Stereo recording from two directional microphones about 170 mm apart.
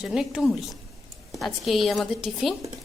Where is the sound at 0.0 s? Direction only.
5° right (ahead or behind).